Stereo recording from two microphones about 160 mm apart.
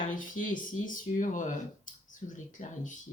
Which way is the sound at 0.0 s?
55° left (ahead or behind).